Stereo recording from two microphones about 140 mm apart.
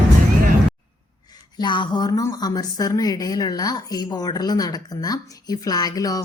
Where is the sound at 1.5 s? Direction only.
35° left (ahead or behind).